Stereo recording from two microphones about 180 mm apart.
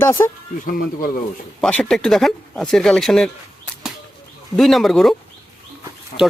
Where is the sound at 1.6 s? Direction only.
5° left (ahead or behind).